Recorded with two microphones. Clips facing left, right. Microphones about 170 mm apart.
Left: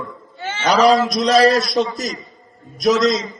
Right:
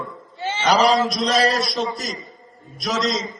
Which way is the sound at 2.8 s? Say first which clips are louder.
Left 8 dB; 40° left (ahead or behind).